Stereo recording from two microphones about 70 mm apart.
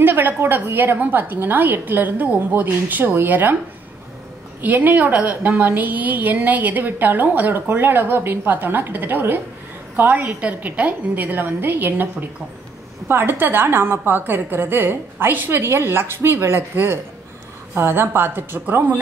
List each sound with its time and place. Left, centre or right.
0.0 s a woman's voice: right
4.6 s a woman's voice: right